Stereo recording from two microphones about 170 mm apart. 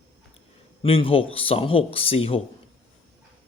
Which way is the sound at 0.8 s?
30° left (ahead or behind).